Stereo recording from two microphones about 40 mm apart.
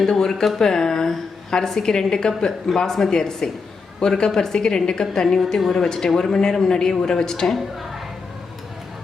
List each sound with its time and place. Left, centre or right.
0.0 s a woman's voice: centre
7.4 s a woman's voice: centre